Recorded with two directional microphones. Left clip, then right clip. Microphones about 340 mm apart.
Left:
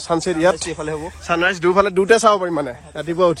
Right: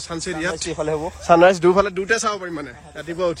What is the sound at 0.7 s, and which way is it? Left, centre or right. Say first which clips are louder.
Speech: right 2 dB; centre.